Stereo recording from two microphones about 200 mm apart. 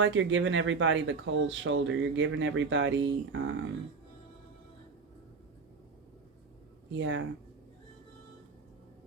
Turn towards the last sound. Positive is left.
turn(degrees=-70)  # may be behind; listen again after turning